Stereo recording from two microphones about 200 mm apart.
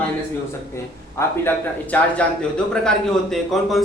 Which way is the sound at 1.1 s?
10° left (ahead or behind).